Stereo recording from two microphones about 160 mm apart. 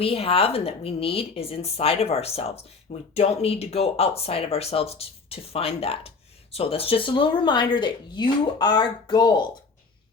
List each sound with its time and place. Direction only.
0.0 s speech: 35° left (ahead or behind)